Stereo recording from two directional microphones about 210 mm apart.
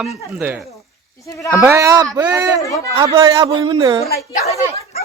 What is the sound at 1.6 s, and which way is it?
A man's voice, 10° right (ahead or behind).